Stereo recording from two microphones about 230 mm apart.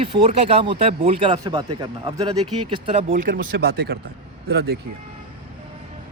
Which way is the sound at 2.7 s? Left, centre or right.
Right.